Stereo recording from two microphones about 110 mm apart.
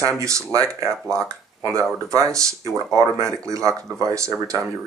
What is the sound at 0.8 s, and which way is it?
Speech, 5° left (ahead or behind).